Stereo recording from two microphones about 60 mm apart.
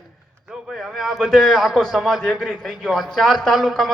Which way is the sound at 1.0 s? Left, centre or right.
Centre.